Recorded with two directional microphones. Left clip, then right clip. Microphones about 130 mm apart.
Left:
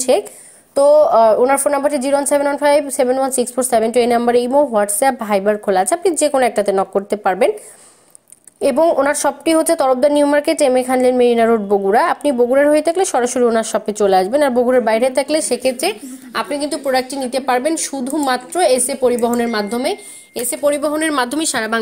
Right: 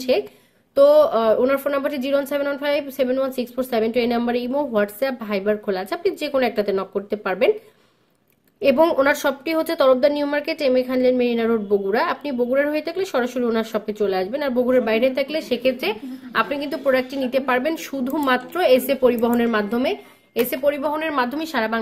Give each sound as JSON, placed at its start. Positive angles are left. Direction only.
{"t": 0.1, "sound": "a woman's voice", "side_deg": 35}
{"t": 0.7, "sound": "a woman's voice", "side_deg": 25}
{"t": 9.0, "sound": "a woman's voice", "side_deg": 25}
{"t": 16.4, "sound": "a woman's voice", "side_deg": 20}
{"t": 21.2, "sound": "a woman's voice", "side_deg": 55}